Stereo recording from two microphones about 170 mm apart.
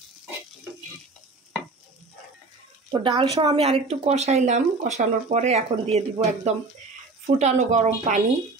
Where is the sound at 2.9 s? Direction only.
30° right (ahead or behind); by 8.2 s 45° right (ahead or behind).